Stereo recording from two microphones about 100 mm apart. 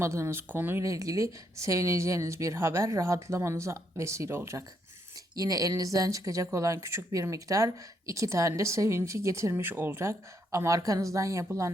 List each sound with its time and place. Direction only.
0.0 s speech: 30° right (ahead or behind)
0.9 s speech: 35° right (ahead or behind)
5.3 s speech: 40° right (ahead or behind)